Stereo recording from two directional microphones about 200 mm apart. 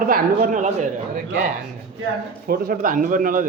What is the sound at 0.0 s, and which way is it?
Speech, 45° right (ahead or behind).